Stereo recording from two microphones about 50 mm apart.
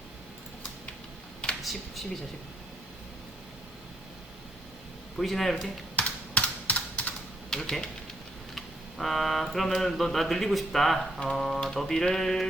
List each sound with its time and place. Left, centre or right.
1.4 s a sound: centre
5.1 s mantra: centre
6.0 s computer keyboard: left
7.5 s speech: centre
8.5 s mantra: centre